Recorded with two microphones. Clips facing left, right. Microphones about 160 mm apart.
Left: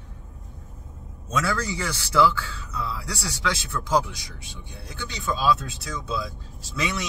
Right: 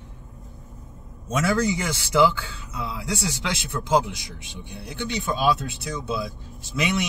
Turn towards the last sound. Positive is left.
turn(degrees=-20)  # may be behind; listen again after turning